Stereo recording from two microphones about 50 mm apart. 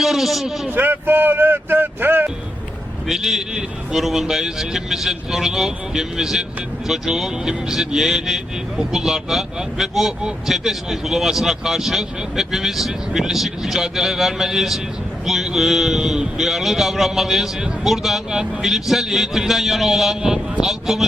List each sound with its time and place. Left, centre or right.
0.0 s a man's voice: centre
0.7 s speech: right
3.1 s a man's voice: centre